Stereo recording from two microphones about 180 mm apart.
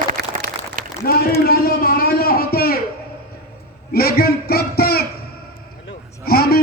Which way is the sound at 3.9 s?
60° left (ahead or behind).